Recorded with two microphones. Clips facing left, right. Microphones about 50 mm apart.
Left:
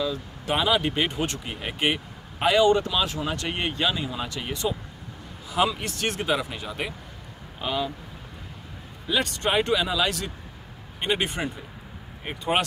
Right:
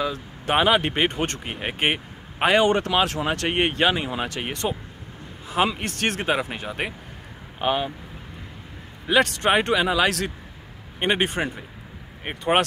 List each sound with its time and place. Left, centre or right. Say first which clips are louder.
0.0 s speech: right 2 dB; right
5.5 s speech: right 1 dB; right
9.0 s speech: right 6 dB; right